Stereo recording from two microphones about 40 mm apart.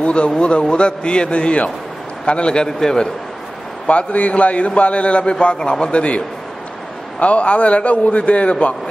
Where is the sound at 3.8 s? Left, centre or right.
Left.